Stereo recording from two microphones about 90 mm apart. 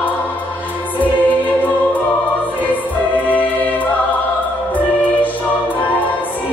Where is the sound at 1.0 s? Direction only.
20° left (ahead or behind).